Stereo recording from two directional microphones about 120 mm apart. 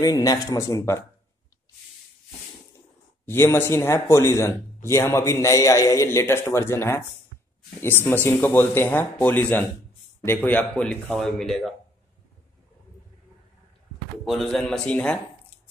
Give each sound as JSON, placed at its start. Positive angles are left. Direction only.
{"t": 0.0, "sound": "a man's voice", "side_deg": 30}
{"t": 3.3, "sound": "a man's voice", "side_deg": 20}
{"t": 14.2, "sound": "a man's voice", "side_deg": 0}